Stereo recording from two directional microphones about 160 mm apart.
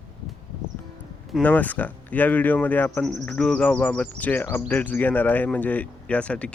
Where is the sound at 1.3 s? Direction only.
10° left (ahead or behind).